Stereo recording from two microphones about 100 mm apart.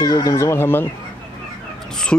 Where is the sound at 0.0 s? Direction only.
35° left (ahead or behind).